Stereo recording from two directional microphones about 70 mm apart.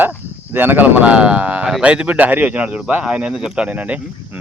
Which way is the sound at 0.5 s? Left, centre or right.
Right.